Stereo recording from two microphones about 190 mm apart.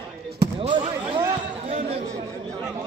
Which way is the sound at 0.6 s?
25° right (ahead or behind).